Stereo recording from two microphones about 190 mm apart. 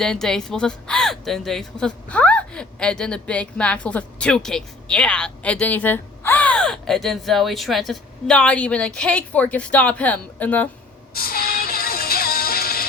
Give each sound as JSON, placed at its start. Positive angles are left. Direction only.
{"t": 0.0, "sound": "a woman's voice", "side_deg": 5}
{"t": 11.1, "sound": "music", "side_deg": 50}